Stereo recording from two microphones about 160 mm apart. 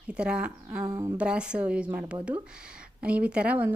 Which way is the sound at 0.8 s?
20° right (ahead or behind).